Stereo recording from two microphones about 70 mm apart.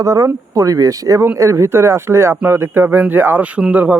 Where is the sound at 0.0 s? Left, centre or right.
Right.